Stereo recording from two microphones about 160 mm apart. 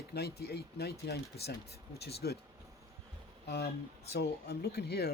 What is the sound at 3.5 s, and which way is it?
Speech, 90° left.